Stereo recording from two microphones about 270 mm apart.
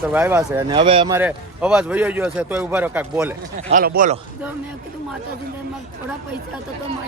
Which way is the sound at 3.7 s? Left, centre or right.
Right.